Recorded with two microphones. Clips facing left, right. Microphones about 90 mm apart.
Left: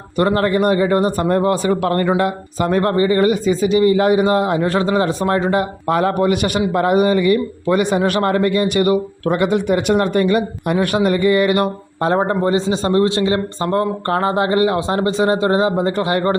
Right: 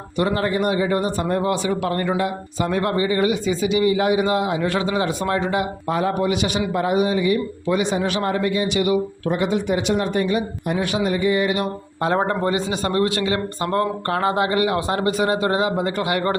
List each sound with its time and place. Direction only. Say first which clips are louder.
0.2 s speech: left 5 dB; 50° left (ahead or behind)
5.9 s a man's voice: left 5 dB; 60° left (ahead or behind)
12.0 s a man's voice: left 4 dB; 30° left (ahead or behind)